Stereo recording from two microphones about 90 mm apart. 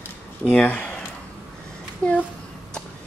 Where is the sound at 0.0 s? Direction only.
15° left (ahead or behind).